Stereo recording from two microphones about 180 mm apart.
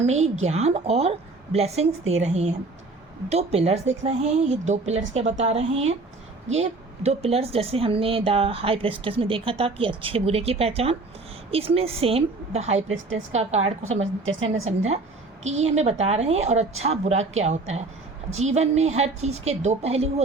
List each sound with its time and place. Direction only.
0.0 s speech: 40° right (ahead or behind)
14.0 s speech: 90° right
15.4 s speech: 40° right (ahead or behind)